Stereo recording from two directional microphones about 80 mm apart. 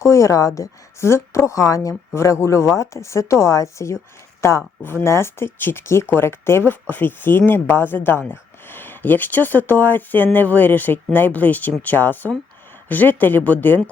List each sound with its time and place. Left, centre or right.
0.0 s a woman's voice: left
4.4 s a sound: left
4.8 s speech: left